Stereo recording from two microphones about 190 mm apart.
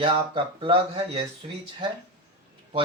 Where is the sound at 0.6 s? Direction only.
30° right (ahead or behind).